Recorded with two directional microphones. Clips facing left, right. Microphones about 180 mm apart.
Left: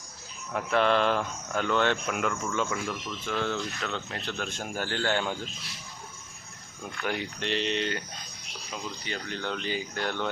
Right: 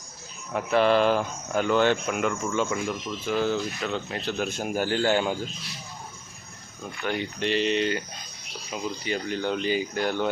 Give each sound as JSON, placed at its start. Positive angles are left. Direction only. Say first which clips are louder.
{"t": 0.5, "sound": "speech", "louder": "right 4 dB", "side_deg": -5}
{"t": 2.6, "sound": "speech", "louder": "right 4 dB", "side_deg": -15}
{"t": 3.2, "sound": "speech", "louder": "right 5 dB", "side_deg": -5}
{"t": 7.0, "sound": "speech", "louder": "right 4 dB", "side_deg": 5}